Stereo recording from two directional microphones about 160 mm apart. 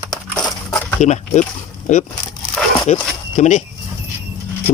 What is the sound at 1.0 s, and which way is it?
Speech, 50° left (ahead or behind).